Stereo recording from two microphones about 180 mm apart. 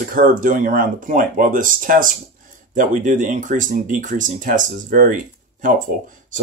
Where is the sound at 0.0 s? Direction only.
50° right (ahead or behind).